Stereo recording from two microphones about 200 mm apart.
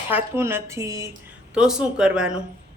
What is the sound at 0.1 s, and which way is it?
Speech, 10° right (ahead or behind).